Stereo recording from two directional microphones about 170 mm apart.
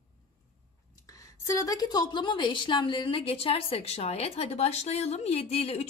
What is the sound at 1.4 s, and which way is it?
A woman's voice, 20° left (ahead or behind).